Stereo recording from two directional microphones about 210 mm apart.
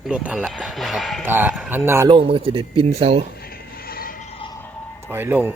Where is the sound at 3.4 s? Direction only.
45° left (ahead or behind).